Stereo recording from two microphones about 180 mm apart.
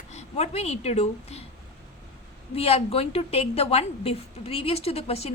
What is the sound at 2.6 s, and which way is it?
A woman's voice, 35° left (ahead or behind).